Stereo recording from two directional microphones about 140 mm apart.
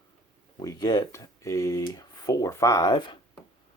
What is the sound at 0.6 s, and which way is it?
Speech, 25° left (ahead or behind).